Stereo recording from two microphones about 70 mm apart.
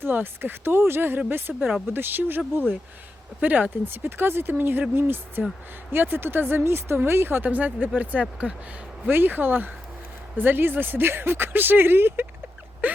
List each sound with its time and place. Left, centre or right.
0.0 s speech: right
3.4 s speech: right
9.0 s speech: right
12.8 s a sound: right